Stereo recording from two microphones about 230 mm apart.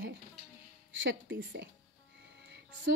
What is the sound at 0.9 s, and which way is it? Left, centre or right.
Speech, right.